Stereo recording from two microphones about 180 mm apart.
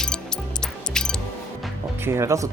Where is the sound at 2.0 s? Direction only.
15° right (ahead or behind).